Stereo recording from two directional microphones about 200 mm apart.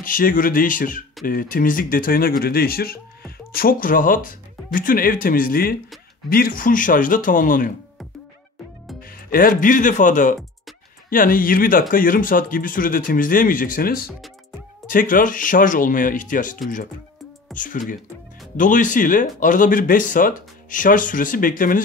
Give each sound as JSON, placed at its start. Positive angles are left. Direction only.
{"t": 0.0, "sound": "speech", "side_deg": 45}
{"t": 9.0, "sound": "speech", "side_deg": 45}
{"t": 17.6, "sound": "speech", "side_deg": 40}